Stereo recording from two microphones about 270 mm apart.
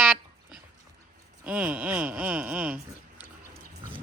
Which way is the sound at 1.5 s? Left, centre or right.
Centre.